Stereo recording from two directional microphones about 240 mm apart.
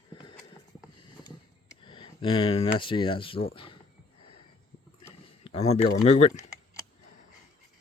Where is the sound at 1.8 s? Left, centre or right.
Left.